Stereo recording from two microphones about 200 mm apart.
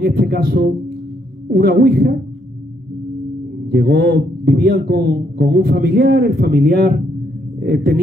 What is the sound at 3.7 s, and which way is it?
A man's voice, 50° right (ahead or behind).